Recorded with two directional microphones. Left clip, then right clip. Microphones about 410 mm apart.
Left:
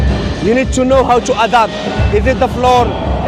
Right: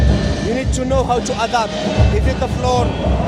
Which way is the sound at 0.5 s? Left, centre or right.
Left.